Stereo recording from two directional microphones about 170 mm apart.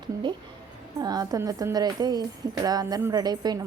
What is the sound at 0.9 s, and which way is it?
A woman's voice, 20° right (ahead or behind).